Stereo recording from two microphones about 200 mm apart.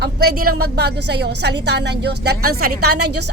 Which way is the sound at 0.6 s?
55° right (ahead or behind).